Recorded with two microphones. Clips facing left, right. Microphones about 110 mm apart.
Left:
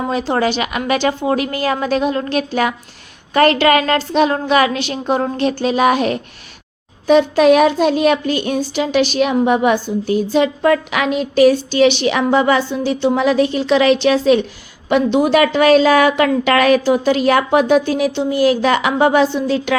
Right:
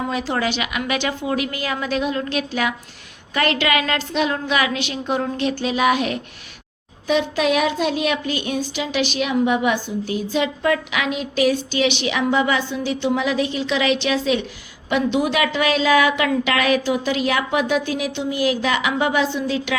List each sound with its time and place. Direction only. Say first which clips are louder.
0.1 s a woman's voice: left 5 dB; 35° left (ahead or behind)